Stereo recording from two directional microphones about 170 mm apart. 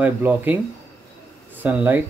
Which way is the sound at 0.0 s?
10° right (ahead or behind).